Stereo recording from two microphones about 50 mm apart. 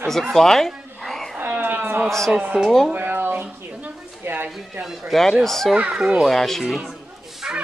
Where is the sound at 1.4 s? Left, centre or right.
Right.